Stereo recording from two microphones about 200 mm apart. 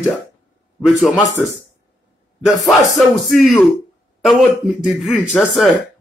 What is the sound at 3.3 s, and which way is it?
Speech, centre (ahead or behind).